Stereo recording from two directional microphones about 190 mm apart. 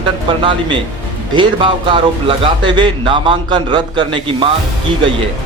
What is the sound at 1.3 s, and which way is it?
Speech, 25° right (ahead or behind).